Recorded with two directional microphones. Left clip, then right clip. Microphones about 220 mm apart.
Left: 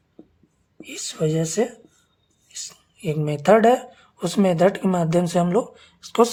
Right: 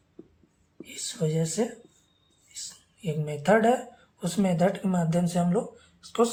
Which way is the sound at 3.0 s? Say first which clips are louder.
Left 7 dB; 50° left (ahead or behind).